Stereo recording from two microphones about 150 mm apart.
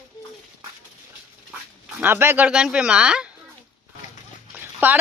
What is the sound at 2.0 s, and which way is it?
Speech, 15° right (ahead or behind).